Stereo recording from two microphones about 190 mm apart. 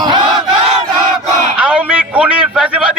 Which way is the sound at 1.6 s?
5° right (ahead or behind).